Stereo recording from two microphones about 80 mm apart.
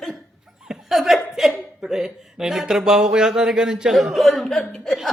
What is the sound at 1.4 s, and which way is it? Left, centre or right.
Speech, centre.